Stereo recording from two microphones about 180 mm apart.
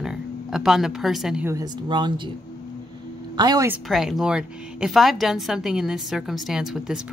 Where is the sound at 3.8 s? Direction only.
Centre (ahead or behind).